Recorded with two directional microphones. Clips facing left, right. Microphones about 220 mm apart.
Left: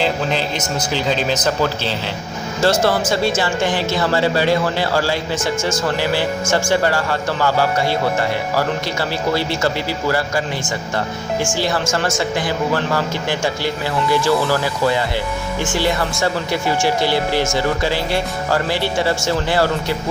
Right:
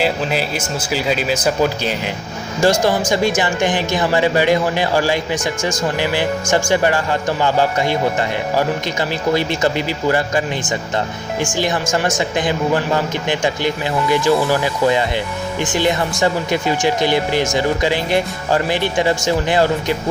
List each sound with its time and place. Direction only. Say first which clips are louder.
0.0 s speech: right 1 dB; 5° right (ahead or behind)
11.5 s speech: right 4 dB; 20° right (ahead or behind)